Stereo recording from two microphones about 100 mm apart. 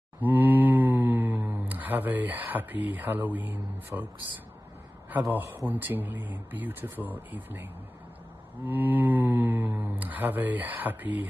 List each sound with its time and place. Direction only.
0.2 s speech: 20° right (ahead or behind)
5.2 s speech: 20° right (ahead or behind)
8.6 s speech: 20° right (ahead or behind)